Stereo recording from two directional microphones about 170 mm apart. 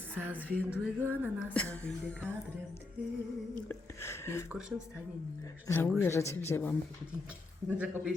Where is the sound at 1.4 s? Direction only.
5° left (ahead or behind).